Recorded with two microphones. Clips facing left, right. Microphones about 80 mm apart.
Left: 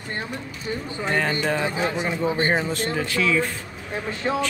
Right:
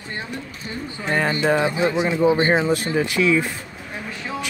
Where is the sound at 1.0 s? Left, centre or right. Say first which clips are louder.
Right 3 dB; centre.